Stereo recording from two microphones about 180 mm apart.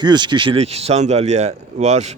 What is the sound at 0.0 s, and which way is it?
Speech, 25° right (ahead or behind).